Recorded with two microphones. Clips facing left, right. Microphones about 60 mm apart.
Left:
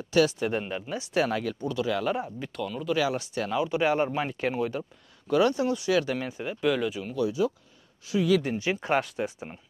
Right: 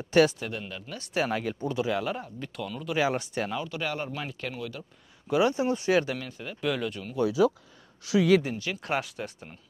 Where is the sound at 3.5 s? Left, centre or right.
Left.